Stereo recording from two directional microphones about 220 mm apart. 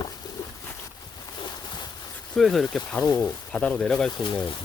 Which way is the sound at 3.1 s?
15° left (ahead or behind).